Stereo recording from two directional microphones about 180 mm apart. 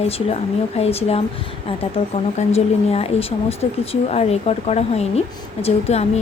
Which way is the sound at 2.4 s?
35° left (ahead or behind).